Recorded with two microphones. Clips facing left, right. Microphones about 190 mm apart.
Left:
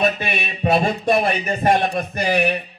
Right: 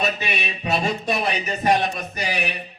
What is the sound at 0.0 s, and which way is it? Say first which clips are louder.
A man's voice: left 4 dB; 50° left (ahead or behind).